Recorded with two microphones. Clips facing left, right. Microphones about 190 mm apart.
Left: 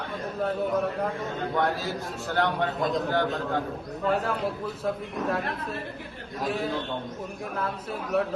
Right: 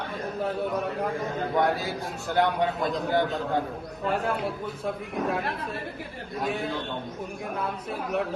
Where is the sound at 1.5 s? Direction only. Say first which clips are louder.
Right 2 dB; 15° right (ahead or behind).